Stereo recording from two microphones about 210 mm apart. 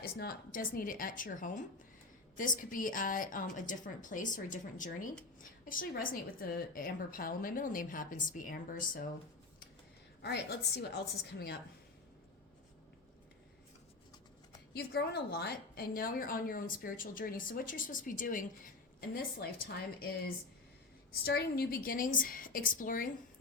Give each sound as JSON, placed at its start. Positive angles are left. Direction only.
{"t": 0.0, "sound": "a woman's voice", "side_deg": 45}
{"t": 10.2, "sound": "a woman's voice", "side_deg": 50}
{"t": 14.7, "sound": "a woman's voice", "side_deg": 50}
{"t": 21.2, "sound": "a woman's voice", "side_deg": 45}